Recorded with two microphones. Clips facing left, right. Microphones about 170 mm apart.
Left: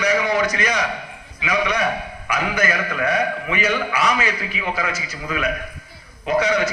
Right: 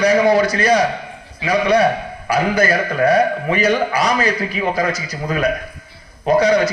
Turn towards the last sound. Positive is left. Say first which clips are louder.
# right 5 dB
turn(degrees=-35)  # may be behind; listen again after turning